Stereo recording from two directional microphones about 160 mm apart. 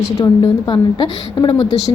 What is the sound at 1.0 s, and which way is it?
Speech, 25° left (ahead or behind).